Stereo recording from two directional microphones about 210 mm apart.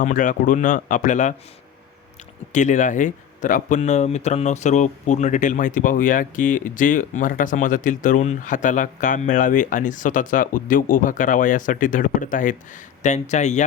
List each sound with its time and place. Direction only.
0.0 s speech: 40° left (ahead or behind)
2.5 s speech: 35° left (ahead or behind)